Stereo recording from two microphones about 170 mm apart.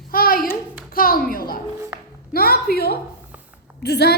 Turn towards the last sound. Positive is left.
turn(degrees=75)  # may be behind; listen again after turning